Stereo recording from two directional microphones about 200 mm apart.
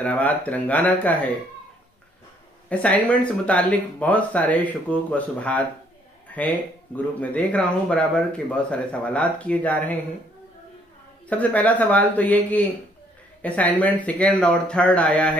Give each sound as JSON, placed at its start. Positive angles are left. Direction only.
{"t": 0.0, "sound": "speech", "side_deg": 10}
{"t": 2.7, "sound": "speech", "side_deg": 5}
{"t": 11.2, "sound": "speech", "side_deg": 5}